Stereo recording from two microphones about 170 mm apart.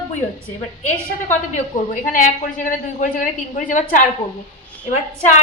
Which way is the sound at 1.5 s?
45° left (ahead or behind).